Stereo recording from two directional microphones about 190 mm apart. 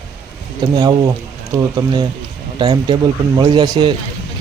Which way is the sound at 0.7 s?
20° right (ahead or behind).